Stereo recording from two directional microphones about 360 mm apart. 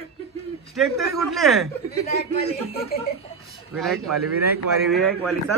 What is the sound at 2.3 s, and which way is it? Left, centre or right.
Speech, centre.